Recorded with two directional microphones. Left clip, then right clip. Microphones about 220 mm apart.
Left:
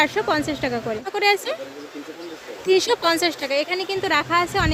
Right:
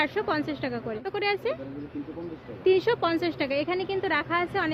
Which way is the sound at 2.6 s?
25° left (ahead or behind).